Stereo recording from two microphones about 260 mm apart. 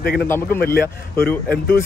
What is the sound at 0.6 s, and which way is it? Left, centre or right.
Speech, left.